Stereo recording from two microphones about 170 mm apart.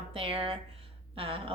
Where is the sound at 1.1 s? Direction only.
35° right (ahead or behind).